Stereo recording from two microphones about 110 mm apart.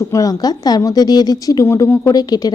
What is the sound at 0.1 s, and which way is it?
Speech, 30° left (ahead or behind).